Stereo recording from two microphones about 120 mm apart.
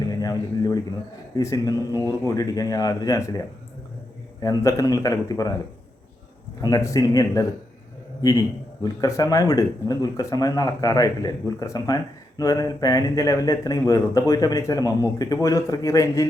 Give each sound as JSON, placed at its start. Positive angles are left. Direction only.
{"t": 0.1, "sound": "speech", "side_deg": 30}
{"t": 6.6, "sound": "speech", "side_deg": 30}